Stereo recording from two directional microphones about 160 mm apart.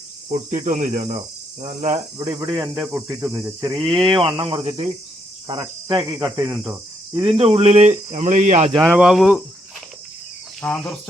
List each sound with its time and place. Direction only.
0.3 s cricket: 50° right (ahead or behind)
2.1 s speech: 35° right (ahead or behind)
2.4 s cricket: 20° right (ahead or behind)
3.8 s speech: centre (ahead or behind)
4.2 s speech: 35° right (ahead or behind)
5.5 s cricket: 30° right (ahead or behind)
6.1 s cricket: 20° right (ahead or behind)
7.1 s speech: 35° right (ahead or behind)
8.9 s speech: 5° right (ahead or behind)
10.6 s cricket: 10° left (ahead or behind)